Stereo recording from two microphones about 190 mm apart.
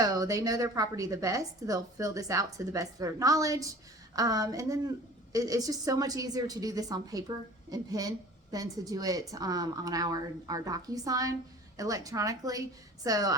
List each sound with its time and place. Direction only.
0.0 s a woman's voice: 20° right (ahead or behind)